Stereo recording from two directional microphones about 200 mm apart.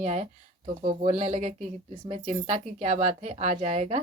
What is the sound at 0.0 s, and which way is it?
Speech, 35° right (ahead or behind).